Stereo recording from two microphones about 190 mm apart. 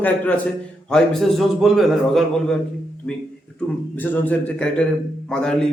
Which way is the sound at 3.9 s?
10° left (ahead or behind).